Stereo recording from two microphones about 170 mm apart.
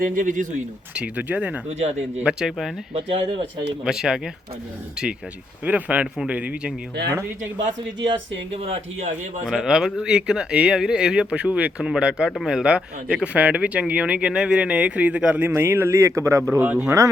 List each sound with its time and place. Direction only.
0.0 s speech: 50° right (ahead or behind)
0.9 s speech: 10° right (ahead or behind)
1.8 s speech: 40° right (ahead or behind)
2.2 s speech: 5° right (ahead or behind)
2.9 s speech: 30° right (ahead or behind)
3.8 s speech: 5° right (ahead or behind)
8.5 s speech: 35° right (ahead or behind)
9.5 s speech: centre (ahead or behind)